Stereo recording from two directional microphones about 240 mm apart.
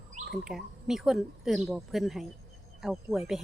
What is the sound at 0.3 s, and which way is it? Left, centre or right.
Speech, centre.